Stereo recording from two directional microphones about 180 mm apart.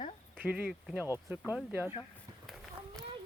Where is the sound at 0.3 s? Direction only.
10° right (ahead or behind).